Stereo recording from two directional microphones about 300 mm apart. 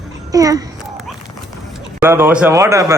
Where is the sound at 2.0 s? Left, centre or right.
Centre.